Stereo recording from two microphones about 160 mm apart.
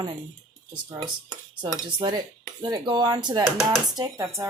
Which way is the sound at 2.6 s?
25° right (ahead or behind).